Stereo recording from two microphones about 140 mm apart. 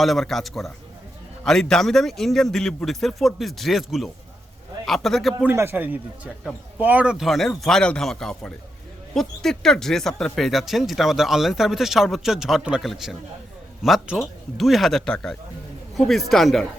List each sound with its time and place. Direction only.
0.0 s speech: centre (ahead or behind)
5.4 s a man's voice: 15° right (ahead or behind); by 16.6 s centre (ahead or behind)